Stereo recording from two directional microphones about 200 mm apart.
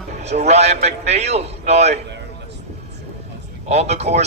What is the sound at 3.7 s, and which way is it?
Speech, 35° right (ahead or behind).